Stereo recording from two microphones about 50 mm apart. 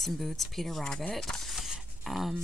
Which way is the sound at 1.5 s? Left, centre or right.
Centre.